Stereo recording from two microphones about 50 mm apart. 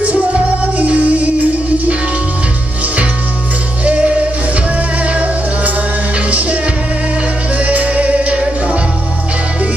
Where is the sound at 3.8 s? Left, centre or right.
Right.